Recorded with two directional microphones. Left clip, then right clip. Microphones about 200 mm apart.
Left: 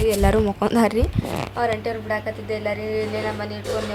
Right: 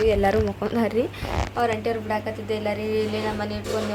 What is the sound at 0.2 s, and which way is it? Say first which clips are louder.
Speech: left 2 dB; 20° left (ahead or behind).